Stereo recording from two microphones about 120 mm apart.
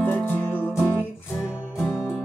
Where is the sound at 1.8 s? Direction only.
20° left (ahead or behind).